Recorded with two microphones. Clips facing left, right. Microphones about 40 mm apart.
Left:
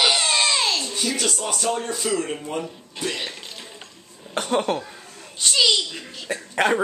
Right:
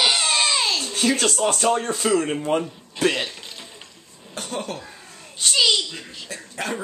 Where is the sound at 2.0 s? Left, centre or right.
Centre.